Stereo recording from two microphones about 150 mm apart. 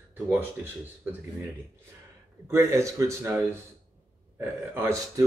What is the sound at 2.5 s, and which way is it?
A man's voice, 15° right (ahead or behind).